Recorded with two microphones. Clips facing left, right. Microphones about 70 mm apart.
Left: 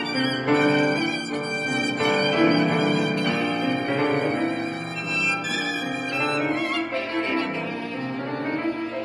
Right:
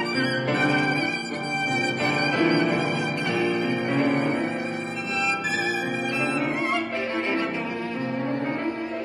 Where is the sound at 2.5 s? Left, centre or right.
Right.